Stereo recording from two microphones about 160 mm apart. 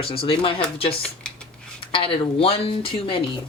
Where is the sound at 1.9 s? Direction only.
35° left (ahead or behind).